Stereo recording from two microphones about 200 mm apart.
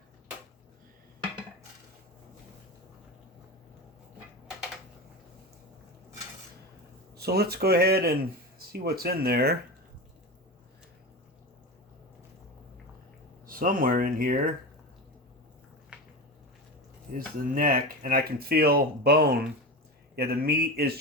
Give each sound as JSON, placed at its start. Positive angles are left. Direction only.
{"t": 7.2, "sound": "speech", "side_deg": -55}
{"t": 13.5, "sound": "speech", "side_deg": -45}
{"t": 15.9, "sound": "a sound", "side_deg": -5}
{"t": 17.2, "sound": "speech", "side_deg": -45}